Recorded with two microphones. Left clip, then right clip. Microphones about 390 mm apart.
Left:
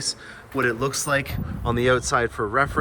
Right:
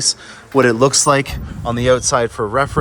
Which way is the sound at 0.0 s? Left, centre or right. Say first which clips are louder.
Right 10 dB; centre.